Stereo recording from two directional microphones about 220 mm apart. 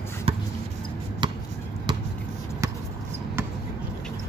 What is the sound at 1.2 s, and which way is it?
Basketball bounce, 20° right (ahead or behind).